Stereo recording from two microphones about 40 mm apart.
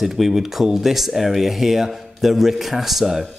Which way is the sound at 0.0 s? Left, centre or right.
Centre.